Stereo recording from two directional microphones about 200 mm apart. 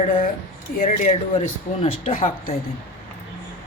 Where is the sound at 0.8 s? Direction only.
40° left (ahead or behind).